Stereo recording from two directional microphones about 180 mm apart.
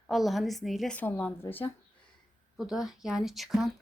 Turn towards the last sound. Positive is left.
turn(degrees=0)  # may be behind; listen again after turning